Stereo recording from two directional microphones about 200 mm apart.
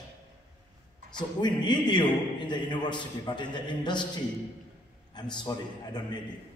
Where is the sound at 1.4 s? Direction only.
20° left (ahead or behind).